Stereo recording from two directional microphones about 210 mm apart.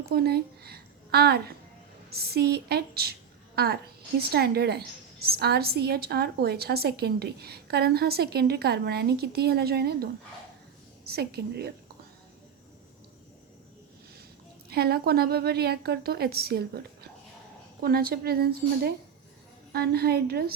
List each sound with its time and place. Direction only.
0.1 s a woman's voice: 50° right (ahead or behind)
14.7 s a woman's voice: 50° right (ahead or behind)